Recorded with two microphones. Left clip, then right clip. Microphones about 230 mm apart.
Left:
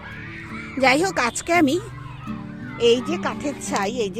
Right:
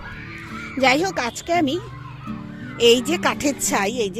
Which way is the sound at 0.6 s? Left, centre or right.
Centre.